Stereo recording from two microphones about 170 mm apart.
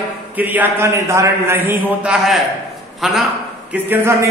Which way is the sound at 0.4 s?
10° right (ahead or behind).